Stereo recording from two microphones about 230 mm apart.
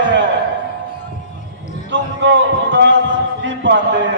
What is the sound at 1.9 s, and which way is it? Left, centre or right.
Music, right.